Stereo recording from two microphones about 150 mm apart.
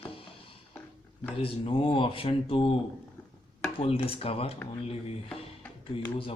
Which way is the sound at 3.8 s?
40° left (ahead or behind).